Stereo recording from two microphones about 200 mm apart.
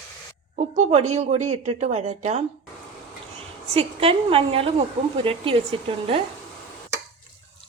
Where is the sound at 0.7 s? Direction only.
35° right (ahead or behind).